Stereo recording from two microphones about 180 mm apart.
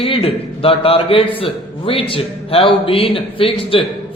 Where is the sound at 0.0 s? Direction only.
30° left (ahead or behind).